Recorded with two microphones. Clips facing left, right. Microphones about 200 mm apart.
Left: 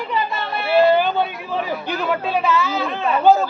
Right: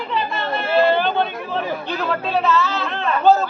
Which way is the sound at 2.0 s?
10° left (ahead or behind).